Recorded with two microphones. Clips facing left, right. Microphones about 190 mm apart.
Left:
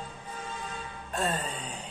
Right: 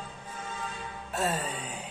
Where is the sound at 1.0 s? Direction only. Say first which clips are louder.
Right 1 dB; 5° right (ahead or behind).